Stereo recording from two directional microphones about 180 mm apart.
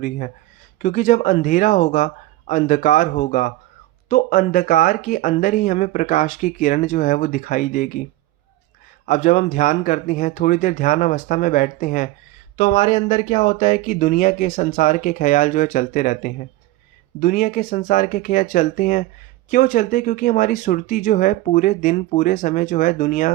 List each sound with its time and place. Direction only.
0.8 s speech: 45° left (ahead or behind)
9.0 s speech: 45° left (ahead or behind)